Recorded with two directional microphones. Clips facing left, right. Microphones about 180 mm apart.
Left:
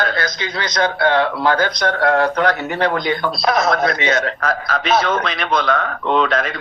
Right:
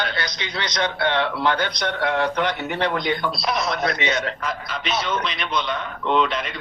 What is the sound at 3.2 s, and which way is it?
A man's voice, 50° left (ahead or behind).